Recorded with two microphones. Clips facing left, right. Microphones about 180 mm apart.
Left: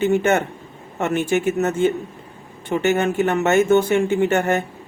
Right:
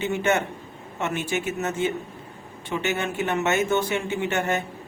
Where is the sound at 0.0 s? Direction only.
50° left (ahead or behind).